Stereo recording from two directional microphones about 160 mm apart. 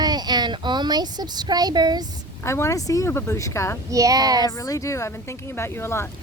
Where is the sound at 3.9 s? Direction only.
20° right (ahead or behind).